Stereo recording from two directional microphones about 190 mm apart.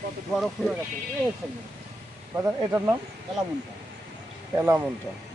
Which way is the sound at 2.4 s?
15° right (ahead or behind).